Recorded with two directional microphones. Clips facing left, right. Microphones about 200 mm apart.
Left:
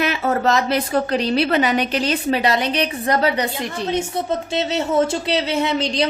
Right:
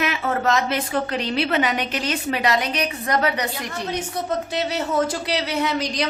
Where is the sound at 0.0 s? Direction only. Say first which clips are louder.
Left 3 dB; 35° left (ahead or behind).